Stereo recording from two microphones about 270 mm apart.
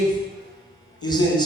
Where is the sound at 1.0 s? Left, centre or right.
Centre.